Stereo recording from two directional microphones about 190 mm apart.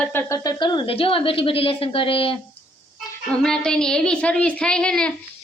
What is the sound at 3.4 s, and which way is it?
Speech, 5° left (ahead or behind).